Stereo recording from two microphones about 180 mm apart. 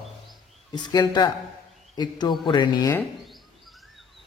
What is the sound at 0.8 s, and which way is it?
Speech, 25° left (ahead or behind).